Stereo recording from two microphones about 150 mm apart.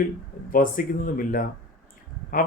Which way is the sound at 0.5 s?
65° left (ahead or behind).